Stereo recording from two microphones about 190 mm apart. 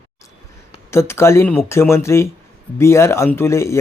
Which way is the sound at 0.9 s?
15° left (ahead or behind).